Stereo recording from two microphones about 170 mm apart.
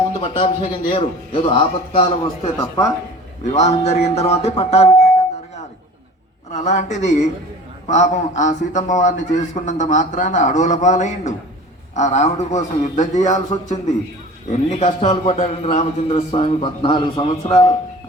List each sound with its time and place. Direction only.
0.1 s a sound: 30° left (ahead or behind)
0.4 s a man's voice: 35° left (ahead or behind)
3.4 s a man's voice: 40° left (ahead or behind)
6.5 s a man's voice: 45° left (ahead or behind)
14.5 s a man's voice: 40° left (ahead or behind)